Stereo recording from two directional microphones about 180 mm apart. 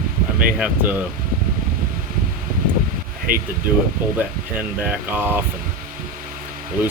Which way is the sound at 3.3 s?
50° right (ahead or behind).